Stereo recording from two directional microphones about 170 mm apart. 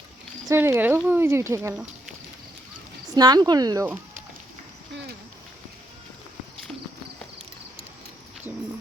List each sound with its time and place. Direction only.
0.4 s speech: 15° right (ahead or behind)
3.2 s speech: 25° right (ahead or behind)